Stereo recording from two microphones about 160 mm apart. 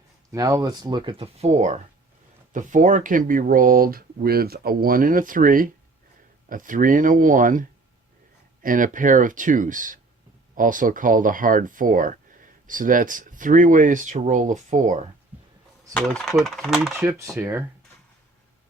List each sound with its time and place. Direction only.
0.3 s speech: 20° right (ahead or behind); by 7.6 s 55° right (ahead or behind)
8.6 s speech: 55° right (ahead or behind)
16.0 s speech: 5° left (ahead or behind); by 17.7 s 15° right (ahead or behind)